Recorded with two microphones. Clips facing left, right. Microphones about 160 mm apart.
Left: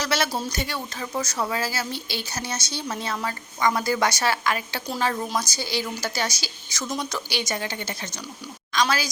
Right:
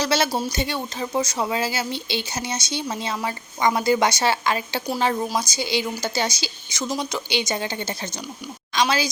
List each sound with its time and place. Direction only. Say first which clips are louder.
0.0 s speech: right 4 dB; 25° right (ahead or behind)